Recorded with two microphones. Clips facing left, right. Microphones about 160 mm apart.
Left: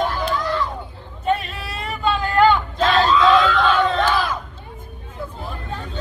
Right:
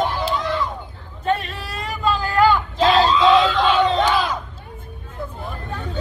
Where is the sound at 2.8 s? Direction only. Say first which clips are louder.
Right 2 dB; 20° right (ahead or behind).